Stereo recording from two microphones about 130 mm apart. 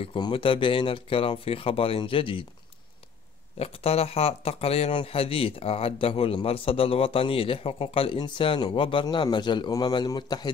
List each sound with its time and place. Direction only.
0.0 s speech: 45° left (ahead or behind)
3.5 s a man's voice: 50° left (ahead or behind); by 10.5 s 35° left (ahead or behind)